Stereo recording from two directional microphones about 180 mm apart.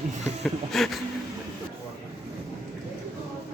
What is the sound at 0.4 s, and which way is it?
Speech, centre (ahead or behind).